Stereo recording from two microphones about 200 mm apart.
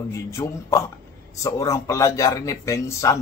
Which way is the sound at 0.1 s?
15° left (ahead or behind).